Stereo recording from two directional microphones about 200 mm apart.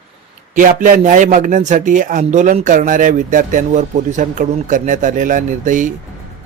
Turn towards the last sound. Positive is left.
turn(degrees=-40)  # may be behind; listen again after turning